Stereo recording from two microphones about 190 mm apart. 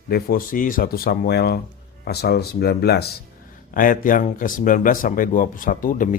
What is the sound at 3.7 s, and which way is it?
Speech, 45° left (ahead or behind).